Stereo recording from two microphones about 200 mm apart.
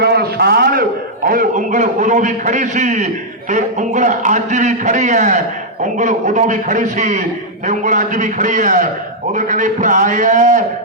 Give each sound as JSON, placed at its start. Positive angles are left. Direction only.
{"t": 0.0, "sound": "a man's voice", "side_deg": -50}